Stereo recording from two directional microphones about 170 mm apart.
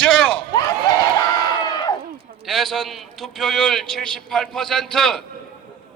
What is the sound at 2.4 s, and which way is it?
A man's voice, centre (ahead or behind).